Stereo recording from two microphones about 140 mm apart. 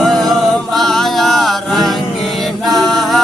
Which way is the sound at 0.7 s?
Centre (ahead or behind).